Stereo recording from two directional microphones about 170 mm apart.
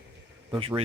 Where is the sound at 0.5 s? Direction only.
30° right (ahead or behind).